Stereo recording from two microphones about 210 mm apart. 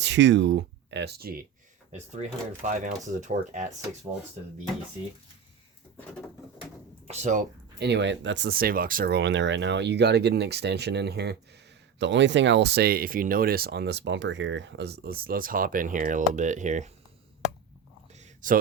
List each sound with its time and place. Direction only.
0.0 s speech: 55° right (ahead or behind); by 3.7 s 35° right (ahead or behind)
7.1 s speech: 35° right (ahead or behind)
7.8 s speech: 55° right (ahead or behind); by 16.9 s 35° right (ahead or behind)
18.1 s a sound: 35° right (ahead or behind)